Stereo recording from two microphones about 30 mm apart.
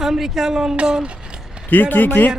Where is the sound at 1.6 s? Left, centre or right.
Left.